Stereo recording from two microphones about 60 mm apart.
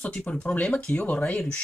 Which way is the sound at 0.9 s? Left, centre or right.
Left.